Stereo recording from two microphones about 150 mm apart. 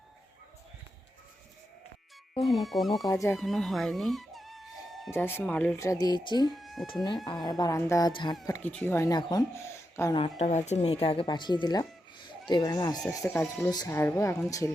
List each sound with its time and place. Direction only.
2.4 s speech: centre (ahead or behind)
3.0 s speech: 25° left (ahead or behind)
3.4 s music: centre (ahead or behind)
5.1 s speech: 15° left (ahead or behind)
5.8 s speech: 25° left (ahead or behind)
6.6 s a sound: centre (ahead or behind)
7.4 s speech: 25° left (ahead or behind)
8.4 s speech: 20° left (ahead or behind)
10.2 s speech: 45° left (ahead or behind); by 13.0 s 25° left (ahead or behind)
13.1 s speech: 15° left (ahead or behind)